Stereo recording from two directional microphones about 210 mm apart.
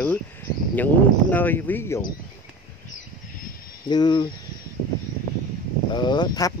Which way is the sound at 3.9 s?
20° left (ahead or behind).